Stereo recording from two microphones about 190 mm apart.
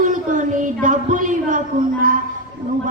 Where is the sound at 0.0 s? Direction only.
45° right (ahead or behind).